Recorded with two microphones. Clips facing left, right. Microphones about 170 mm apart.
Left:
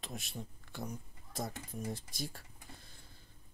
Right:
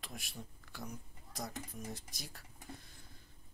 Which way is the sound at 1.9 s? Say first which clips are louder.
Left 6 dB; 30° left (ahead or behind).